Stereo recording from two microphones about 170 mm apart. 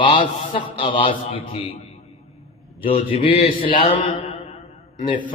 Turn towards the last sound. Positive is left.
turn(degrees=30)  # may be behind; listen again after turning